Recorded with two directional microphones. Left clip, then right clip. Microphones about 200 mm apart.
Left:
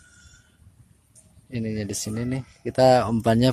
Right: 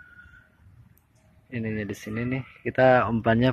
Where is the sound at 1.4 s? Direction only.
25° left (ahead or behind).